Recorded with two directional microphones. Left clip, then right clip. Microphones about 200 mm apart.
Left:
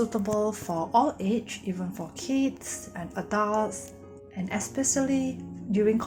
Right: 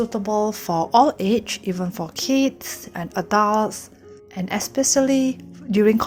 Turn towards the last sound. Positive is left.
turn(degrees=-50)  # may be behind; listen again after turning